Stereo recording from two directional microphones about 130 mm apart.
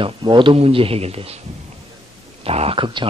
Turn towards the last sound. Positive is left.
turn(degrees=-45)  # may be behind; listen again after turning